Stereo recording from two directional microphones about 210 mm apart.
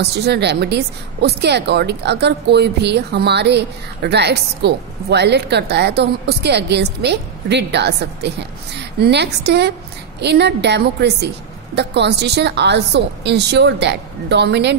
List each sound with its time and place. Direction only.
0.1 s a woman's voice: 50° right (ahead or behind)